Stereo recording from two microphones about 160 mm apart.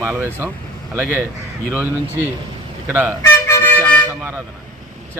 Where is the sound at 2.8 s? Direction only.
10° right (ahead or behind).